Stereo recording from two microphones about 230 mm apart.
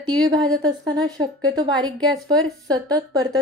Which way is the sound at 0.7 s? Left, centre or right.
Centre.